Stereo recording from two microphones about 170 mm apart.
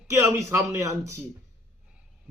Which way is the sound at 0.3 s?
15° right (ahead or behind).